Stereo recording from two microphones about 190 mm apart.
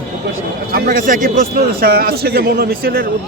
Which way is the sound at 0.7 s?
50° right (ahead or behind).